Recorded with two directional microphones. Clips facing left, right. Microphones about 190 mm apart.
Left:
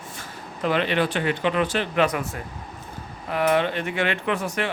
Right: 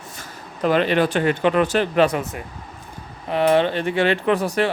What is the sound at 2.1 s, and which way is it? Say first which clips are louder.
Speech: right 3 dB; 20° right (ahead or behind).